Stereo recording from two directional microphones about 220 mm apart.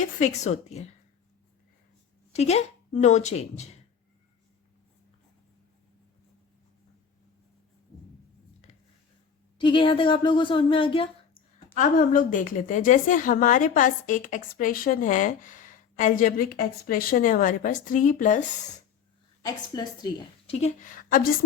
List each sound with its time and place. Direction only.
0.0 s a woman's voice: 30° left (ahead or behind)
2.3 s a woman's voice: 30° left (ahead or behind)
9.6 s a woman's voice: 20° left (ahead or behind)
11.7 s a woman's voice: 40° left (ahead or behind)
19.4 s a woman's voice: 20° left (ahead or behind); by 21.2 s 40° left (ahead or behind)